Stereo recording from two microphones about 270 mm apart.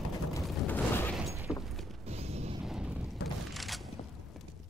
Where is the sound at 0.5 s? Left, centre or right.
Centre.